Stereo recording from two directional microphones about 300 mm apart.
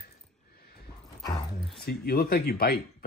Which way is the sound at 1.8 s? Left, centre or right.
Left.